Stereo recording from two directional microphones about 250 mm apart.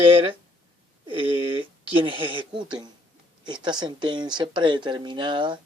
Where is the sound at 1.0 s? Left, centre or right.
Right.